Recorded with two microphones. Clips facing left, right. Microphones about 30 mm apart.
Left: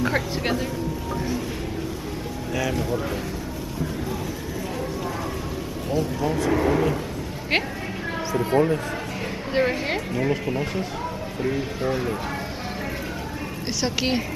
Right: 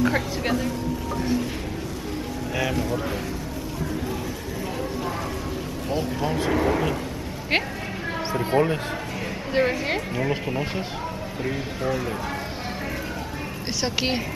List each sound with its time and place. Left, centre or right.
0.0 s speech: centre
2.7 s speech: centre
5.9 s speech: right
6.5 s speech: centre
8.4 s speech: centre
9.5 s speech: centre
13.7 s speech: centre